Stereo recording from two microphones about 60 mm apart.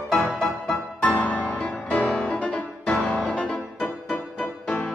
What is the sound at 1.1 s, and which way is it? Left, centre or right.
Music, left.